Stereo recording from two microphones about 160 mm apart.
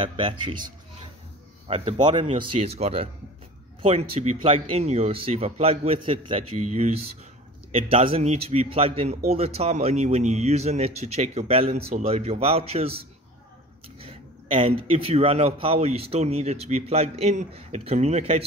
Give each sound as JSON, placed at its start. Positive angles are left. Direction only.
{"t": 0.0, "sound": "speech", "side_deg": -30}
{"t": 1.7, "sound": "speech", "side_deg": -35}
{"t": 4.2, "sound": "speech", "side_deg": -40}
{"t": 7.7, "sound": "speech", "side_deg": -35}